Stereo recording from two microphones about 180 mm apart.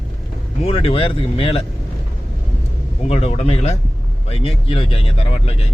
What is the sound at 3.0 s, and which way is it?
Speech, 35° left (ahead or behind).